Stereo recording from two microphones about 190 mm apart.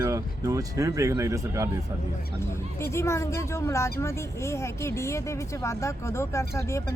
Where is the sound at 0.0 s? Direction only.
15° right (ahead or behind).